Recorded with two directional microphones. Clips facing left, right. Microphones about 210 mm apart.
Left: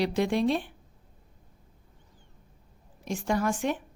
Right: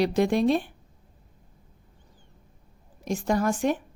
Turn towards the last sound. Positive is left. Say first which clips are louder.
# right 3 dB
turn(degrees=-40)  # may be behind; listen again after turning